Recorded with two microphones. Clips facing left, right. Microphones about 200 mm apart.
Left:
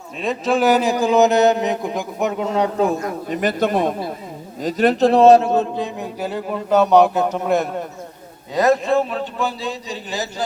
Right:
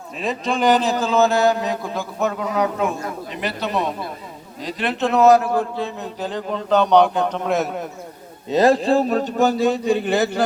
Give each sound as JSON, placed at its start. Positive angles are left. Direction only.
{"t": 0.2, "sound": "a man's voice", "side_deg": 0}
{"t": 3.2, "sound": "a man's voice", "side_deg": 45}
{"t": 8.4, "sound": "a man's voice", "side_deg": -30}